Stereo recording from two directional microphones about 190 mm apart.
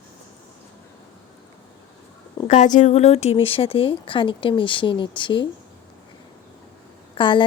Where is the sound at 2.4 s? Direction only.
40° left (ahead or behind).